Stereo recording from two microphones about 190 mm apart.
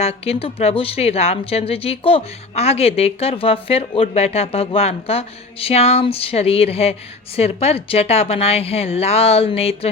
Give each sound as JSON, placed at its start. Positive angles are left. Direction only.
{"t": 0.0, "sound": "speech", "side_deg": 30}